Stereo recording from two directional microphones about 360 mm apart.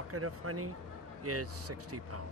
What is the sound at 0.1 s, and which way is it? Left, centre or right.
Speech, right.